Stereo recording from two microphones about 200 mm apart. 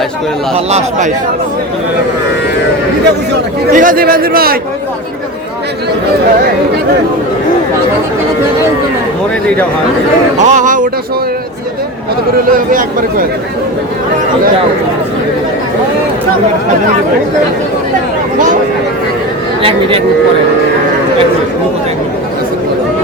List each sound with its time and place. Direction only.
0.5 s speech: 35° right (ahead or behind)
3.7 s speech: 45° right (ahead or behind)
10.3 s speech: 35° right (ahead or behind)
12.5 s speech: 45° right (ahead or behind)